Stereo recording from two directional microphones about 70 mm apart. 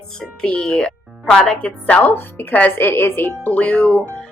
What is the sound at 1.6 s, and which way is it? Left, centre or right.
Speech, left.